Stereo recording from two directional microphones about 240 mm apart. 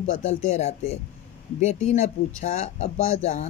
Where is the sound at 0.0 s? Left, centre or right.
Left.